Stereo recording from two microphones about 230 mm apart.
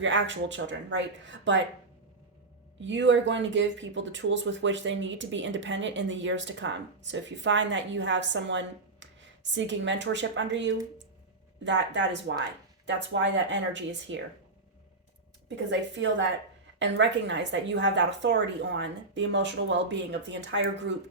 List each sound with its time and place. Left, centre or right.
0.0 s speech: right
2.8 s speech: right
15.4 s speech: right